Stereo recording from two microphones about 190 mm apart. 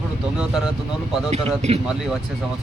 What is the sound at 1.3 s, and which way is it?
Speech, 35° right (ahead or behind).